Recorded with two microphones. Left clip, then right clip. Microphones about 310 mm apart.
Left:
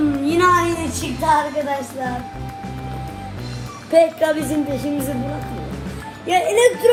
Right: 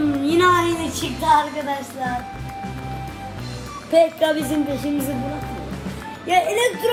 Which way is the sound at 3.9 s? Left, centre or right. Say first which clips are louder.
Left 2 dB; centre.